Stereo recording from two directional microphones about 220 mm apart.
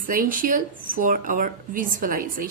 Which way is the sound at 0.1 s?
40° right (ahead or behind).